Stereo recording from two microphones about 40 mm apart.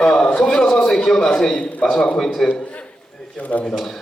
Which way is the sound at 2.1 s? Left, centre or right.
Centre.